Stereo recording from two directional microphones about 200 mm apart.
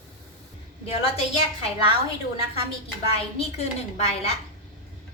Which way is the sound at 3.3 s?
35° left (ahead or behind).